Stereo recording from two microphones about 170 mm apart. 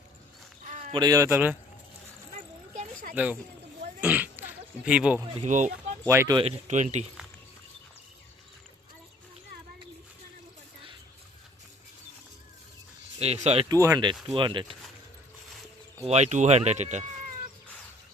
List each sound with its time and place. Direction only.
0.7 s a sound: 40° right (ahead or behind)
0.9 s speech: 20° right (ahead or behind)
2.7 s a sound: 55° right (ahead or behind)
4.0 s speech: 10° right (ahead or behind)
5.4 s speech: 45° right (ahead or behind)
6.1 s speech: 15° right (ahead or behind)
6.3 s speech: 40° right (ahead or behind)
13.1 s speech: 40° right (ahead or behind)
13.7 s speech: 20° right (ahead or behind)
16.0 s speech: 40° right (ahead or behind)